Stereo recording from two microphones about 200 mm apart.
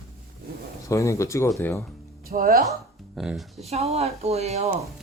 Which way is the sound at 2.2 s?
50° right (ahead or behind).